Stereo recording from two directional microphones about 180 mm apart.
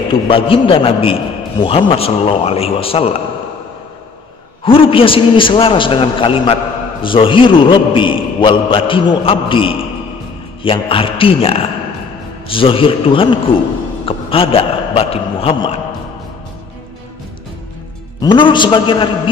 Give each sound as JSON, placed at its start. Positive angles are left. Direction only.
{"t": 0.1, "sound": "a man's voice", "side_deg": 30}
{"t": 4.6, "sound": "a man's voice", "side_deg": 30}
{"t": 18.2, "sound": "a man's voice", "side_deg": 25}